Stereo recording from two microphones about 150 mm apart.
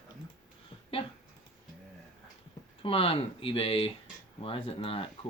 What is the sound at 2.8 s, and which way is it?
Speech, 40° left (ahead or behind).